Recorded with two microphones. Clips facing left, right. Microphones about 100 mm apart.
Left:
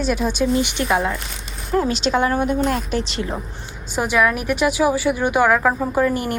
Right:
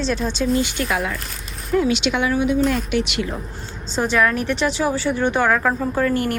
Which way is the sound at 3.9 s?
10° left (ahead or behind).